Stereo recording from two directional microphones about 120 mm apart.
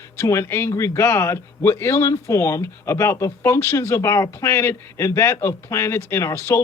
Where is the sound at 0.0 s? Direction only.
25° left (ahead or behind).